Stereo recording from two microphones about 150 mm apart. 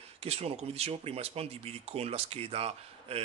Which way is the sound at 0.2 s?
40° right (ahead or behind).